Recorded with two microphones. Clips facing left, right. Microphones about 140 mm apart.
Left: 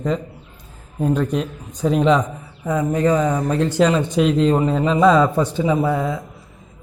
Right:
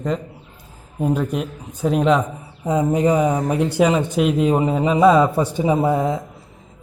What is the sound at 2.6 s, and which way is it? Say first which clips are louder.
Speech: right 1 dB; 15° right (ahead or behind).